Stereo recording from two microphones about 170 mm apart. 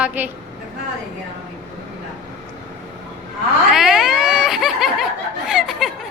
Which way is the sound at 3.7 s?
Centre (ahead or behind).